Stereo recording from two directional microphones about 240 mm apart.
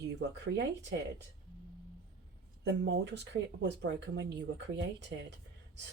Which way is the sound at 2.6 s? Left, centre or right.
Right.